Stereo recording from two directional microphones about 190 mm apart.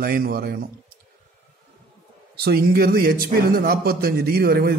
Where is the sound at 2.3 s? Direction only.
55° right (ahead or behind).